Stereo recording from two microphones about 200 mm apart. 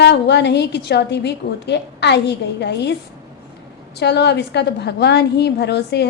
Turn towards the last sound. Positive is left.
turn(degrees=55)  # may be behind; listen again after turning